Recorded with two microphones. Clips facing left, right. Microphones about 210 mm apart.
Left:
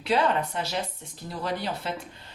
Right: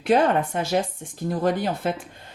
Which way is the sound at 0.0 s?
50° right (ahead or behind).